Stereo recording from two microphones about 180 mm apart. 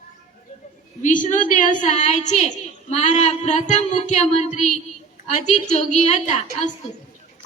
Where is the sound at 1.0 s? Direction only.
45° left (ahead or behind).